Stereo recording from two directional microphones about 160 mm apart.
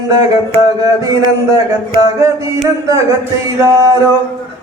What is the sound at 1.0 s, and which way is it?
Speech, 25° right (ahead or behind).